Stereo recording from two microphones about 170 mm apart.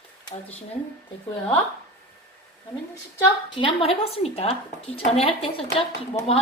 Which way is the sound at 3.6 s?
30° left (ahead or behind).